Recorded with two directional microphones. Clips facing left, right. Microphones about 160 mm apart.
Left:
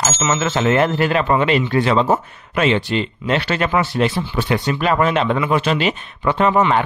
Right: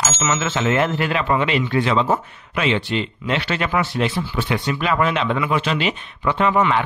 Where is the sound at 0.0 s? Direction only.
30° left (ahead or behind).